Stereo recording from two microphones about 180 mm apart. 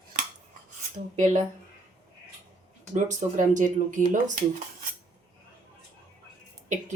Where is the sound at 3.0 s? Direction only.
45° right (ahead or behind).